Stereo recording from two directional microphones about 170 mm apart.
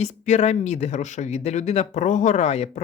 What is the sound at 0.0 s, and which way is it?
Speech, 40° left (ahead or behind).